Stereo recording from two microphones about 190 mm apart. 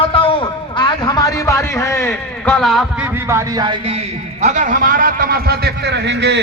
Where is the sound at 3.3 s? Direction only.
15° right (ahead or behind).